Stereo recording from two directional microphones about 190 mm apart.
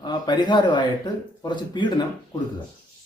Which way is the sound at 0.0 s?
25° left (ahead or behind).